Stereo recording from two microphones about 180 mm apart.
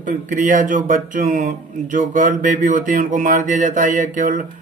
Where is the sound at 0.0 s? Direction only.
45° right (ahead or behind).